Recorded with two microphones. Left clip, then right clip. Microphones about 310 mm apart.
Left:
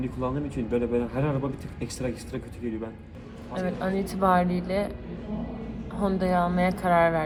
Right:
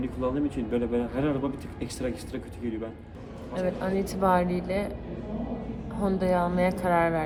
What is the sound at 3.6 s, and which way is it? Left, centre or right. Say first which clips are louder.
A woman's voice: right 1 dB; centre.